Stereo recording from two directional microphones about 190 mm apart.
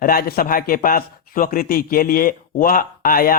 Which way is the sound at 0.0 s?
50° left (ahead or behind).